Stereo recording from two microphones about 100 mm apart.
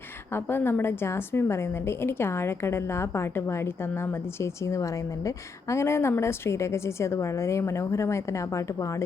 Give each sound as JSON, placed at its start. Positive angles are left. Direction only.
{"t": 0.3, "sound": "a woman's voice", "side_deg": 25}